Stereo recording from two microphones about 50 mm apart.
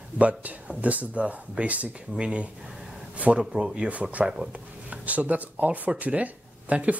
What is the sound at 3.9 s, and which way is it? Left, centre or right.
Speech, right.